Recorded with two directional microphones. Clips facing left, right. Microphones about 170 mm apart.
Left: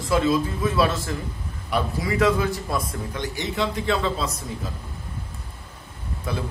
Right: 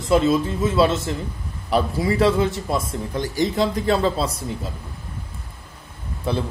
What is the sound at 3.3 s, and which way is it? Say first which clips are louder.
Speech: right 7 dB; 35° right (ahead or behind).